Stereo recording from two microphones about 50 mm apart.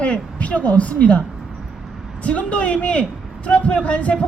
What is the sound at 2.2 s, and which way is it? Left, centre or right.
A man's voice, left.